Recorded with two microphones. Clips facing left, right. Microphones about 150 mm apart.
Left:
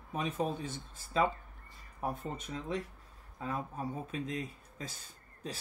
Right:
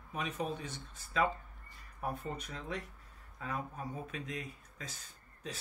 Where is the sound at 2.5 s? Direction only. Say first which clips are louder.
Left 4 dB; 25° left (ahead or behind).